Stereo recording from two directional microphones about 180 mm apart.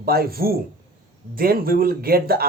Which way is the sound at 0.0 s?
55° right (ahead or behind).